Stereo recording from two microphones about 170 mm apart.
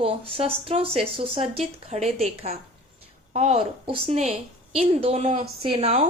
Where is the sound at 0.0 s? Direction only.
35° right (ahead or behind).